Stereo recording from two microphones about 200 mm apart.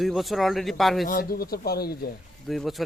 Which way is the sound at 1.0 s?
45° left (ahead or behind).